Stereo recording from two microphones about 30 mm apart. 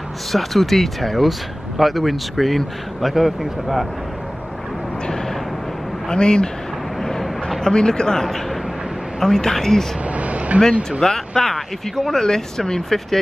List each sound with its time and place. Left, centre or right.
0.3 s speech: centre
6.0 s speech: left
7.0 s vehicle: centre
7.6 s speech: left
10.0 s vehicle: right
10.8 s speech: centre